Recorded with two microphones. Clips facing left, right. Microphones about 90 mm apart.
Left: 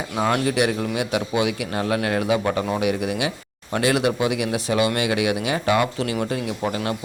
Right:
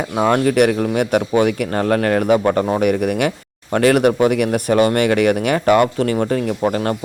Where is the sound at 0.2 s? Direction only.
45° right (ahead or behind).